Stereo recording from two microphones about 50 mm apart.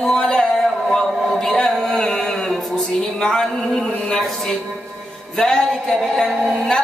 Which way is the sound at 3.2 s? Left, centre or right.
Centre.